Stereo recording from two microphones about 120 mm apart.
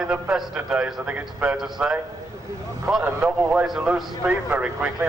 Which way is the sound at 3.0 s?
15° right (ahead or behind).